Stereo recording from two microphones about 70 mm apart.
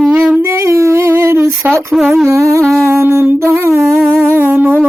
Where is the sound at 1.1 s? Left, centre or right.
Right.